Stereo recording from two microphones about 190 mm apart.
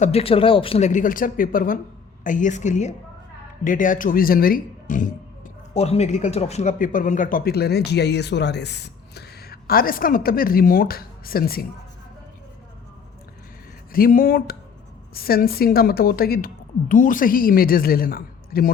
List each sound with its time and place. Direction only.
0.0 s speech: 30° left (ahead or behind)
5.7 s speech: 35° left (ahead or behind); by 11.6 s 50° left (ahead or behind)
13.9 s speech: 50° left (ahead or behind)